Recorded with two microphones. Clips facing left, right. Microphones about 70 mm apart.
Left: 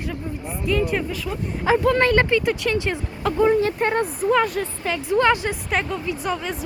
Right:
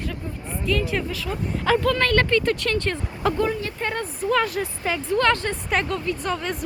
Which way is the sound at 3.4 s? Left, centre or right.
Left.